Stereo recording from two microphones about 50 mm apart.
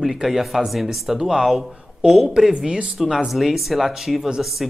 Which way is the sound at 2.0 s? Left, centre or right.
Centre.